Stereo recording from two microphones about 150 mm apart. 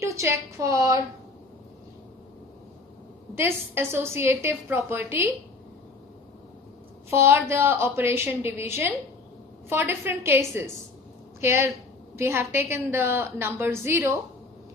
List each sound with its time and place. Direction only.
0.0 s a woman's voice: 20° right (ahead or behind)
3.3 s a woman's voice: 15° right (ahead or behind)
7.1 s a woman's voice: 15° right (ahead or behind)